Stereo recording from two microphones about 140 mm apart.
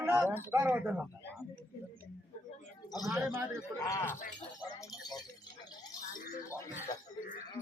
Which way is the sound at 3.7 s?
20° left (ahead or behind).